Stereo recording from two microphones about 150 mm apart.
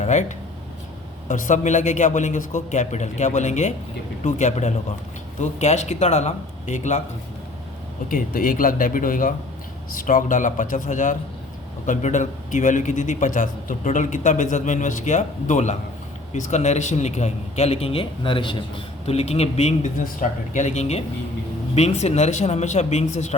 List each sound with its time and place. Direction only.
0.0 s a man's voice: 55° left (ahead or behind)
8.1 s a man's voice: 70° left (ahead or behind); by 23.3 s 50° left (ahead or behind)